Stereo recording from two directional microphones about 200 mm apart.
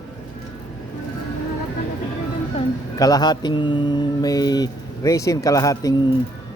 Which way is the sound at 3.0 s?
20° left (ahead or behind).